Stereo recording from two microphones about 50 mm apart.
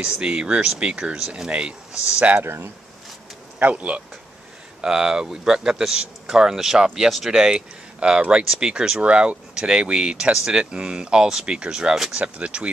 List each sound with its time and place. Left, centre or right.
0.2 s speech: right
2.3 s speech: right
3.5 s speech: right
4.8 s speech: centre
12.2 s speech: right